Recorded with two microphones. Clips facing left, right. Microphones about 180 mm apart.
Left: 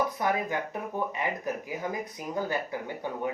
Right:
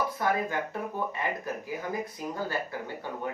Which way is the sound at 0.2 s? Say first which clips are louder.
Even; 20° left (ahead or behind).